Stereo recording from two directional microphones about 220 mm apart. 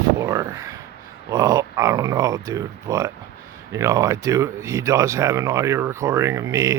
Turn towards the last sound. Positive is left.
turn(degrees=-15)  # may be behind; listen again after turning